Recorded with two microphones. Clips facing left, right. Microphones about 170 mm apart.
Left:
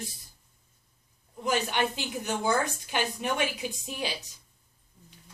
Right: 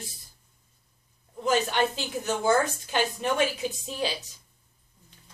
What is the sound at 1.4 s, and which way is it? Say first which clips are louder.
A woman's voice: right 3 dB; 15° left (ahead or behind).